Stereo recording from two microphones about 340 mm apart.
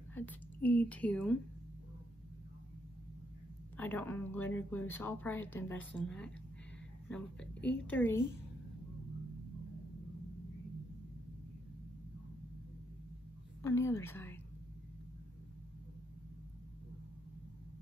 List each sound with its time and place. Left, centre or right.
0.1 s a woman's voice: centre
3.7 s speech: centre
13.6 s a woman's voice: centre